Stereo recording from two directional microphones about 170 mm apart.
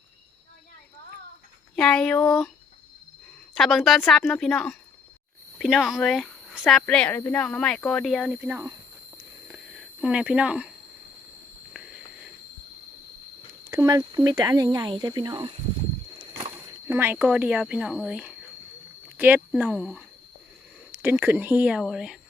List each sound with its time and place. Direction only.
1.7 s a woman's voice: 5° left (ahead or behind)
3.5 s a woman's voice: centre (ahead or behind)
8.4 s speech: 10° right (ahead or behind)
9.5 s a sound: 5° right (ahead or behind)
13.7 s speech: 20° right (ahead or behind)
16.8 s speech: 15° right (ahead or behind)
19.5 s speech: 5° right (ahead or behind)